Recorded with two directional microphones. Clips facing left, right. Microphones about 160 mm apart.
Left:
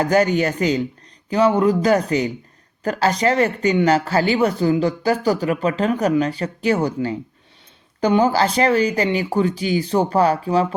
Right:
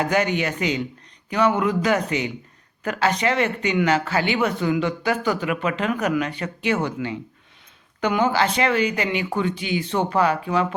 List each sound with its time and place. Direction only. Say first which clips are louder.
0.0 s speech: left 5 dB; 40° left (ahead or behind)